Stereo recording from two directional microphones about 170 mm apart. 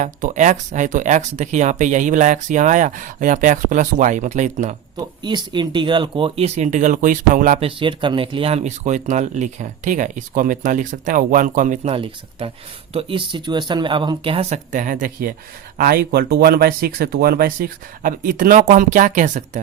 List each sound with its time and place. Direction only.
0.0 s speech: 45° right (ahead or behind)
4.9 s speech: 25° right (ahead or behind); by 7.6 s 50° right (ahead or behind)
7.6 s speech: 30° right (ahead or behind); by 19.6 s 45° right (ahead or behind)